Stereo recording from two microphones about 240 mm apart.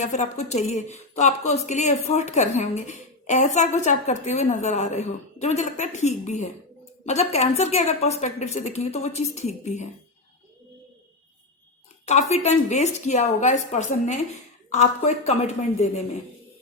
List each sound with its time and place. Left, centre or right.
0.0 s a woman's voice: left
12.0 s a woman's voice: left